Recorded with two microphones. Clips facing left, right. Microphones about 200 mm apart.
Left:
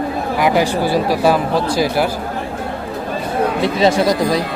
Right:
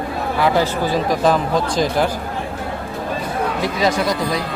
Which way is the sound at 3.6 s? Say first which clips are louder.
Left 5 dB; 30° left (ahead or behind).